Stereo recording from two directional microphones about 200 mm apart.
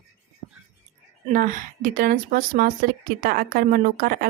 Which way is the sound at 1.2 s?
40° right (ahead or behind).